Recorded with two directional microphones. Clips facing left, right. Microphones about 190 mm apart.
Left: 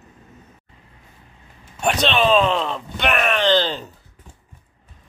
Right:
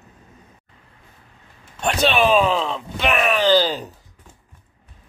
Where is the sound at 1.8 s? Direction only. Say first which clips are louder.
Right 1 dB; centre (ahead or behind).